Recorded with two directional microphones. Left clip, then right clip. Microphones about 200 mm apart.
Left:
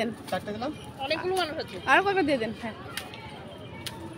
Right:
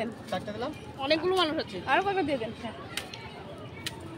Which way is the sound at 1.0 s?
45° right (ahead or behind).